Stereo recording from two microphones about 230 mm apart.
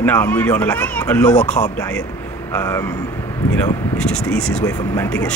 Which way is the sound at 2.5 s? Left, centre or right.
Centre.